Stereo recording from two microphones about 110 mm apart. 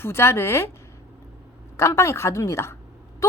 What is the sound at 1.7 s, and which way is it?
A woman's voice, 25° left (ahead or behind).